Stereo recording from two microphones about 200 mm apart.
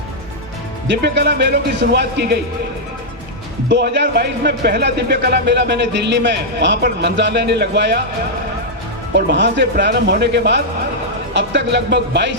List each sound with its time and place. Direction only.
0.9 s speech: 60° right (ahead or behind)
3.7 s speech: 60° right (ahead or behind)
9.1 s speech: 60° right (ahead or behind)